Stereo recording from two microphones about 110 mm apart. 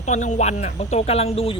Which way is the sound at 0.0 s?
90° left.